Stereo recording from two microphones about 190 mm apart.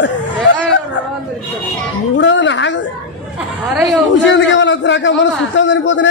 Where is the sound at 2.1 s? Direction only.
75° left (ahead or behind).